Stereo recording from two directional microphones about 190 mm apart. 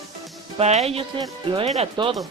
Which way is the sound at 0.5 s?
35° right (ahead or behind).